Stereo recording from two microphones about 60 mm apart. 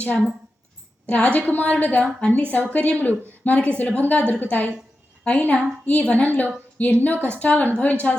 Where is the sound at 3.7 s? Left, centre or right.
Left.